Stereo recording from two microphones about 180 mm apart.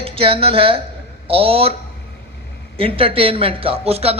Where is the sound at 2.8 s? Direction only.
30° right (ahead or behind).